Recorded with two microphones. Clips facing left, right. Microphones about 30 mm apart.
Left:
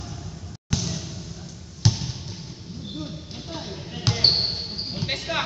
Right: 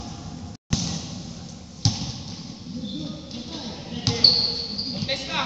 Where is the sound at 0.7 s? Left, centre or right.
Right.